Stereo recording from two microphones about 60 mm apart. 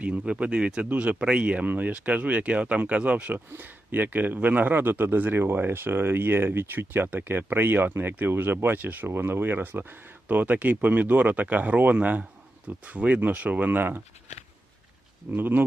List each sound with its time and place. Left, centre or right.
0.0 s a man's voice: right
9.0 s speech: right
15.4 s a man's voice: right